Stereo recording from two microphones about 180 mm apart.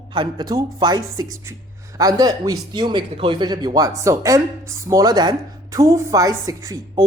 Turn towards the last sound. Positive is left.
turn(degrees=-20)  # may be behind; listen again after turning